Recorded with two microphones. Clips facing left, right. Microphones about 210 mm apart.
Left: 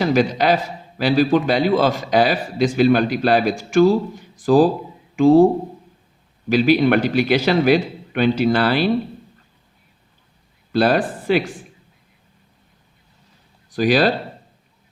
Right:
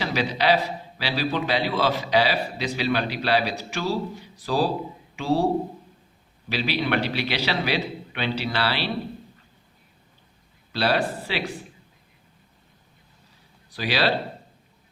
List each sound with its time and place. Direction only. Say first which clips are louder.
0.0 s a man's voice: left 7 dB; 50° left (ahead or behind)
6.5 s a man's voice: left 10 dB; 45° left (ahead or behind)
10.7 s a man's voice: left 7 dB; 50° left (ahead or behind)
13.7 s speech: left 9 dB; 45° left (ahead or behind)